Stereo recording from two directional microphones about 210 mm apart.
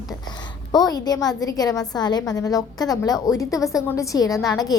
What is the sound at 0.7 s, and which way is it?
A woman's voice, 20° left (ahead or behind).